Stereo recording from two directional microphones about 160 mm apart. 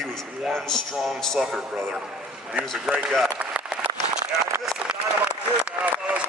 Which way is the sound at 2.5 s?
5° right (ahead or behind).